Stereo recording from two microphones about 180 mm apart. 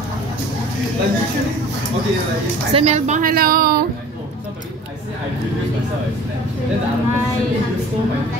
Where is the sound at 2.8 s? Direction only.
40° right (ahead or behind); by 3.8 s 55° right (ahead or behind).